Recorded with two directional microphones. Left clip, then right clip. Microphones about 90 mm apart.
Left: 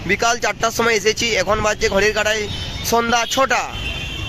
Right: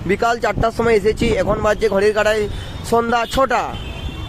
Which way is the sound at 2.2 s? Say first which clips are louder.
Right 2 dB; 55° right (ahead or behind).